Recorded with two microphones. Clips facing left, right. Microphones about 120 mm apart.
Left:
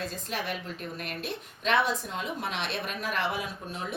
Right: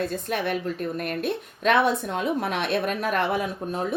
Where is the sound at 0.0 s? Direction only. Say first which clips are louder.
Right 8 dB; 55° right (ahead or behind).